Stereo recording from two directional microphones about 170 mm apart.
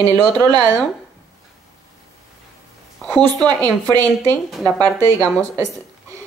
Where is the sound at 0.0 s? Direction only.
10° left (ahead or behind).